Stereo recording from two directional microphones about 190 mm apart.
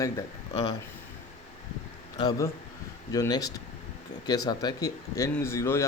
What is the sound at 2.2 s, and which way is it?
Speech, 20° left (ahead or behind).